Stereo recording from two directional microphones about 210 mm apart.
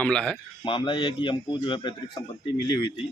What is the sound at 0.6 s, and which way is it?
Speech, 25° left (ahead or behind).